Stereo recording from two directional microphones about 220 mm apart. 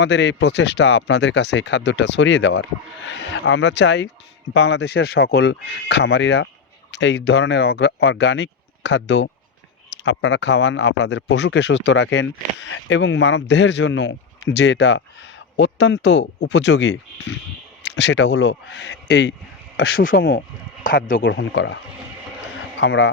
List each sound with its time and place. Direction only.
0.0 s speech: 55° left (ahead or behind)
21.3 s speech: 60° left (ahead or behind)
22.8 s speech: 55° left (ahead or behind)